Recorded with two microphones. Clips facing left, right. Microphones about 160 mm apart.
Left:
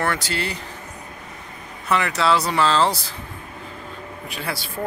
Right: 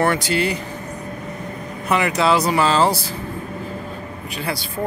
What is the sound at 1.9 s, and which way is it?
Speech, 15° right (ahead or behind).